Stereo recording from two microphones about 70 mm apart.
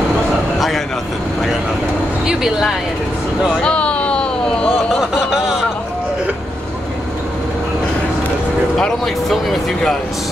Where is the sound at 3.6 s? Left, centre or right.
Centre.